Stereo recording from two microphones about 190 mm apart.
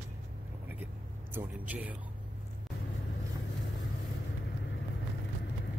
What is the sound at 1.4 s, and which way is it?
Speech, 10° right (ahead or behind).